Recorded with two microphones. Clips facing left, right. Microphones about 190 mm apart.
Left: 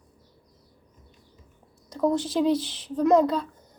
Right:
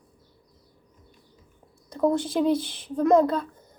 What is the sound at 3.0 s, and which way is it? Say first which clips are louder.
Speech: even; 5° right (ahead or behind).